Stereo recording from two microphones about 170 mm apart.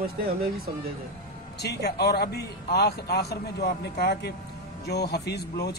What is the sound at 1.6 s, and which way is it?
Speech, 75° left (ahead or behind).